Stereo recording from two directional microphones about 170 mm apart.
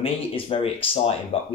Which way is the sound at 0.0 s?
35° left (ahead or behind).